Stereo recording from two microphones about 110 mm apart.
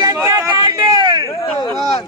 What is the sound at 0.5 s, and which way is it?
Speech, 45° right (ahead or behind).